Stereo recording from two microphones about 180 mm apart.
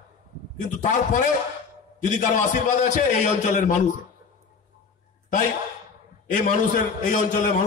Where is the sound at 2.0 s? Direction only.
45° left (ahead or behind).